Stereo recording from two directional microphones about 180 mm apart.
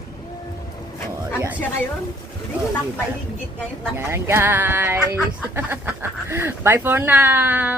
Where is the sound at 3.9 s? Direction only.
15° right (ahead or behind).